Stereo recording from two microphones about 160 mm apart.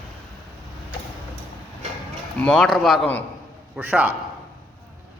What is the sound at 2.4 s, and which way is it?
Speech, 5° left (ahead or behind).